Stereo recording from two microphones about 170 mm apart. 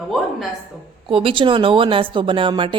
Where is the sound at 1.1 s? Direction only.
30° right (ahead or behind).